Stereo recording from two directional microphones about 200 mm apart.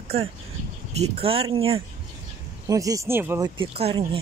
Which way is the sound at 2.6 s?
15° right (ahead or behind).